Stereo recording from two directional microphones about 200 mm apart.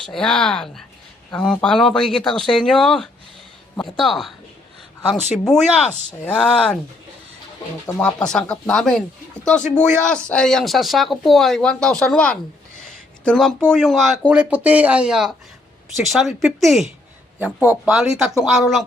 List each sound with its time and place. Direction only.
0.0 s speech: centre (ahead or behind)
5.5 s speech: 35° left (ahead or behind)
6.2 s speech: 5° left (ahead or behind)
7.9 s speech: 5° left (ahead or behind)
12.8 s a sound: 5° left (ahead or behind)
13.7 s speech: centre (ahead or behind)